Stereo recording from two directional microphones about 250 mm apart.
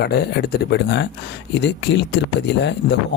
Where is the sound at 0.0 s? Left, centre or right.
Left.